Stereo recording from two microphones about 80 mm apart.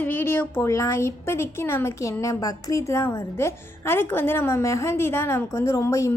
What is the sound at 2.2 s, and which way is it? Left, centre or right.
A woman's voice, left.